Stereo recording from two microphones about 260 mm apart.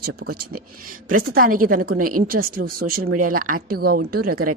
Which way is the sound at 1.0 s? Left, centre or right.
Right.